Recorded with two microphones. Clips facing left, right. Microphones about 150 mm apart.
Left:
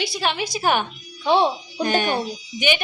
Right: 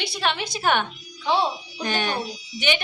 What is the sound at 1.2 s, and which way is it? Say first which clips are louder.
Speech: left 4 dB; 60° left (ahead or behind).